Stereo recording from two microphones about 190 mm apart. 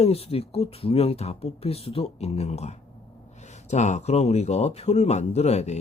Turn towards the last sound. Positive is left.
turn(degrees=35)  # may be behind; listen again after turning